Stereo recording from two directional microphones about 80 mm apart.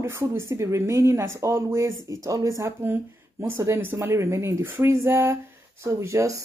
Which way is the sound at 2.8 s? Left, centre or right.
Right.